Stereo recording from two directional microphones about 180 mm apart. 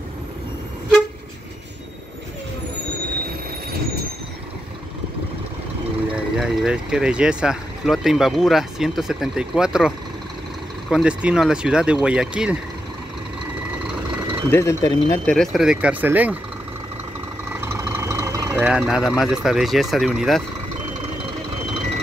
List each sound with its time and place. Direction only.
6.1 s speech: 5° right (ahead or behind)
14.5 s speech: 15° left (ahead or behind)
15.2 s speech: centre (ahead or behind)
17.7 s speech: 15° right (ahead or behind)